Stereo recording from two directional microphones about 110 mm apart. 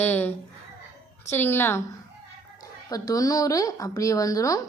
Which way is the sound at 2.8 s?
35° left (ahead or behind).